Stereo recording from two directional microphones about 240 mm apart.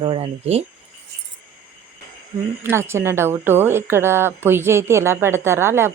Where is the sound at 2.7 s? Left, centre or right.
Centre.